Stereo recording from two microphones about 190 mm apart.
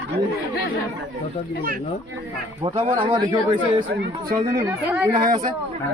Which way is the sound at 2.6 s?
30° right (ahead or behind).